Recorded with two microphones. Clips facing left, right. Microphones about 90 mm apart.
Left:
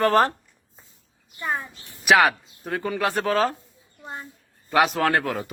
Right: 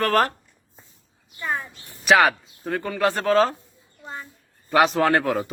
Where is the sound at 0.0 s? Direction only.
20° left (ahead or behind).